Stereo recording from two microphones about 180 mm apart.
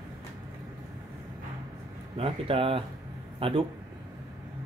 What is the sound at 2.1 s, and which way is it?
A man's voice, 30° right (ahead or behind).